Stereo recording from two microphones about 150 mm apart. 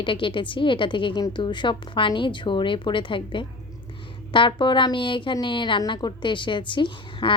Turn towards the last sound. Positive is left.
turn(degrees=30)  # may be behind; listen again after turning